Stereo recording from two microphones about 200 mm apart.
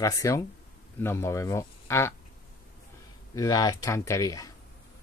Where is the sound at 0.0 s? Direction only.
15° left (ahead or behind).